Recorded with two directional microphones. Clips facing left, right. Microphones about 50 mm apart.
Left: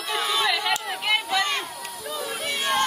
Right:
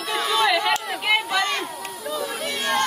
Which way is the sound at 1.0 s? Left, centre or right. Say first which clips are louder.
Right 2 dB; centre.